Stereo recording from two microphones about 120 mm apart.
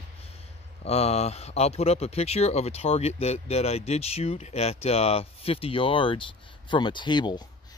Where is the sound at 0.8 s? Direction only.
60° left (ahead or behind).